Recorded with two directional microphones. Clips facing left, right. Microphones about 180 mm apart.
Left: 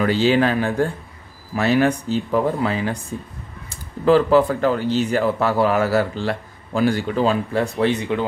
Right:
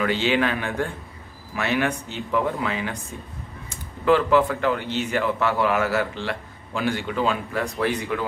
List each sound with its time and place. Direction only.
0.0 s speech: 35° left (ahead or behind)